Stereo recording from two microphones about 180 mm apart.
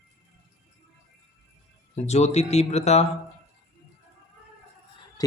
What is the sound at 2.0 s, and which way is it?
Speech, 35° left (ahead or behind).